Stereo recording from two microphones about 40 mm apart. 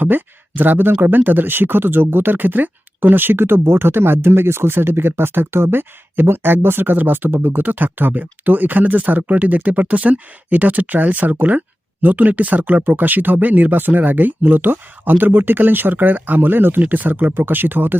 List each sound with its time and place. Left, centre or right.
0.0 s speech: right
6.8 s speech: right
16.8 s speech: right